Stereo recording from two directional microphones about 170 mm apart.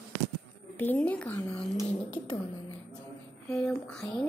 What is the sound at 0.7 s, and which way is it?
Speech, 10° left (ahead or behind).